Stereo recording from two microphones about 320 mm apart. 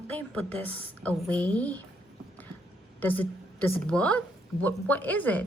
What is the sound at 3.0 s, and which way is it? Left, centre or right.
A woman's voice, centre.